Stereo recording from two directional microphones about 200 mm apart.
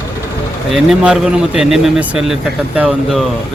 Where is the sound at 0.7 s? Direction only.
Centre (ahead or behind).